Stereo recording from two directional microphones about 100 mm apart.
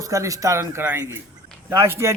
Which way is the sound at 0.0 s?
35° right (ahead or behind).